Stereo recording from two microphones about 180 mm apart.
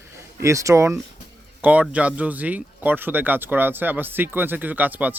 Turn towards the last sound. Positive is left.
turn(degrees=-10)  # may be behind; listen again after turning